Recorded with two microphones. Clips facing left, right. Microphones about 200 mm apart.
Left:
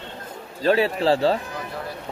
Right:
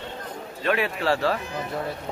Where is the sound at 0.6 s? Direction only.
30° left (ahead or behind).